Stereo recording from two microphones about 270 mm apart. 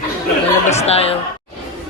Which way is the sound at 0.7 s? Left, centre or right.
Left.